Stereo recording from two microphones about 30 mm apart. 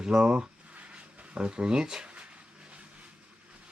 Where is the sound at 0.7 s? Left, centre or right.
Right.